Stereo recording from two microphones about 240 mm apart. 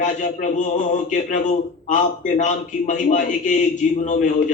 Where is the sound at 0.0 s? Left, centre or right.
Left.